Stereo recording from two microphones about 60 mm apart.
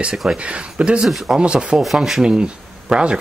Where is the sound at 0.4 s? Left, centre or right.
Centre.